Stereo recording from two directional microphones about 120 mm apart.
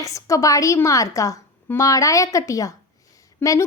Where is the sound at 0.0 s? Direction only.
25° left (ahead or behind).